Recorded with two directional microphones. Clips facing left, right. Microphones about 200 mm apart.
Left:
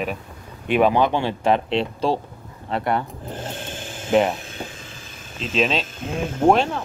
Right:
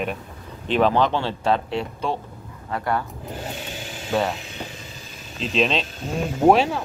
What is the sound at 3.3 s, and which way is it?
Speech, 10° right (ahead or behind).